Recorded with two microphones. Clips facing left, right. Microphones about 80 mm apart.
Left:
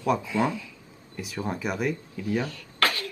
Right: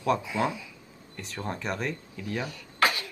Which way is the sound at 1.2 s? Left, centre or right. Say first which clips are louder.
Left 4 dB; centre.